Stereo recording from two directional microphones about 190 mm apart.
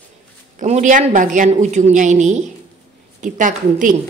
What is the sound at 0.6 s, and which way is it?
A woman's voice, 40° right (ahead or behind).